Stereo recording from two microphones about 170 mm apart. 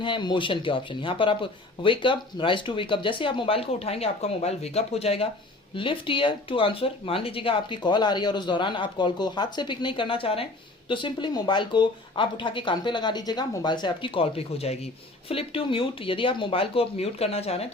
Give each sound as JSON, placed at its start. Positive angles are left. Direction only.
{"t": 0.0, "sound": "speech", "side_deg": 25}